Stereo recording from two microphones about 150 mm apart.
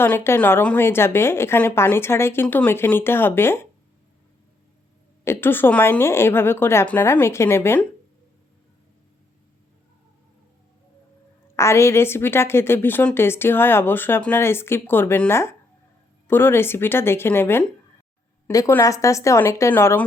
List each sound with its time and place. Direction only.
0.0 s a woman's voice: 15° left (ahead or behind)
5.2 s a woman's voice: 15° left (ahead or behind)
11.5 s a woman's voice: 20° left (ahead or behind)